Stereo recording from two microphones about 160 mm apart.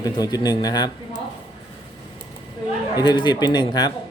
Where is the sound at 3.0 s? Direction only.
25° left (ahead or behind).